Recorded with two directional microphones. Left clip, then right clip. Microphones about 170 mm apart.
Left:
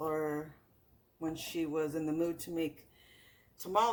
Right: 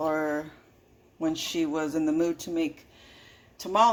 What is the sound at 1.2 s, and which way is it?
A man's voice, 50° right (ahead or behind).